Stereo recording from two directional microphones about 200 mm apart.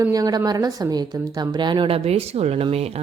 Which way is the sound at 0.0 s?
15° right (ahead or behind).